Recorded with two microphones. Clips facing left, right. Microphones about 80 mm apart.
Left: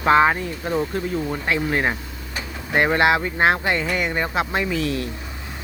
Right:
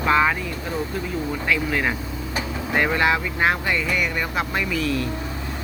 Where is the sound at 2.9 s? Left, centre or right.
Left.